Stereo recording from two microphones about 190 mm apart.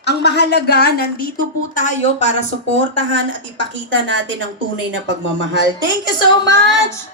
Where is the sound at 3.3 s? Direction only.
75° right (ahead or behind).